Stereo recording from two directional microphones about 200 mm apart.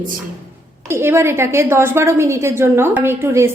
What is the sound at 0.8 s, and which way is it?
A woman's voice, 10° right (ahead or behind).